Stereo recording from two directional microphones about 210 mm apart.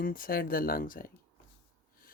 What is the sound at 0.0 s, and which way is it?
Speech, 45° left (ahead or behind).